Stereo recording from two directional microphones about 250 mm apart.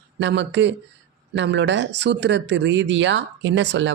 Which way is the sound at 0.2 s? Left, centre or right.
Right.